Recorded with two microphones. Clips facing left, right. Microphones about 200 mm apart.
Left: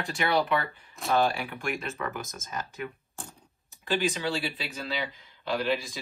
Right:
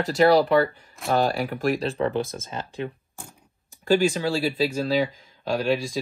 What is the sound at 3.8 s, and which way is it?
Speech, 45° right (ahead or behind).